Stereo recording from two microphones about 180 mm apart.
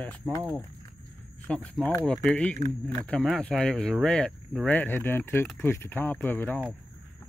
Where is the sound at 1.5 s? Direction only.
5° left (ahead or behind).